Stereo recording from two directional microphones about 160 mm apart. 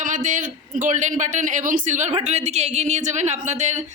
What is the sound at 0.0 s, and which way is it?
A man's voice, 50° right (ahead or behind).